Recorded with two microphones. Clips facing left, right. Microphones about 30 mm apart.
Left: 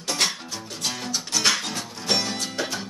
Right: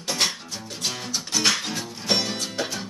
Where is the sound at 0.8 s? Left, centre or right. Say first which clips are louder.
Even; centre.